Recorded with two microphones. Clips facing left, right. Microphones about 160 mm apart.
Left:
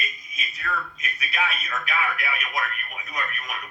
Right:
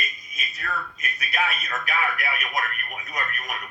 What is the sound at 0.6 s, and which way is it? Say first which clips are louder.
Speech: left 1 dB; 45° right (ahead or behind).